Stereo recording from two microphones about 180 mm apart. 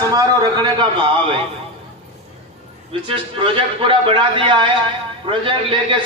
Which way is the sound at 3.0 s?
30° right (ahead or behind).